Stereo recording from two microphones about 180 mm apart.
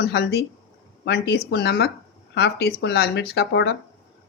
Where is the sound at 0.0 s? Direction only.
70° left (ahead or behind).